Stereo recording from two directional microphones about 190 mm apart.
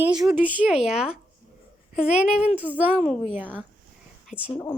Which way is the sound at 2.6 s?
10° right (ahead or behind).